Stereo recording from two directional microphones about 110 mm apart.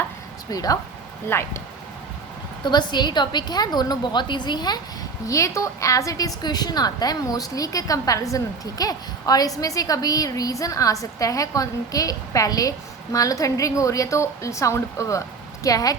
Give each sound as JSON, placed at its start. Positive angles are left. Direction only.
{"t": 0.5, "sound": "a woman's voice", "side_deg": 35}
{"t": 1.3, "sound": "a woman's voice", "side_deg": 20}
{"t": 2.6, "sound": "a woman's voice", "side_deg": 40}
{"t": 5.2, "sound": "a woman's voice", "side_deg": 30}